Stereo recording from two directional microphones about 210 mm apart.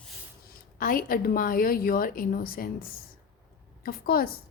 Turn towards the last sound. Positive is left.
turn(degrees=45)  # may be behind; listen again after turning